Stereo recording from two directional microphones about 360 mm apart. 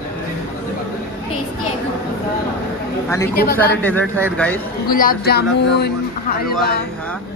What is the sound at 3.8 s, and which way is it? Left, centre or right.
Speech, centre.